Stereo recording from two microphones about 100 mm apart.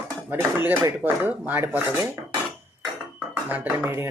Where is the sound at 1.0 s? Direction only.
20° right (ahead or behind).